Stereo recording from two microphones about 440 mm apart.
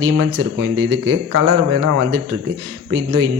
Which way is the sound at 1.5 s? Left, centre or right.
Right.